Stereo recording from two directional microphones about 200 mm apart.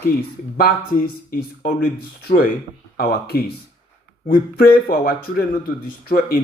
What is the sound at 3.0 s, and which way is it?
Speech, 50° left (ahead or behind).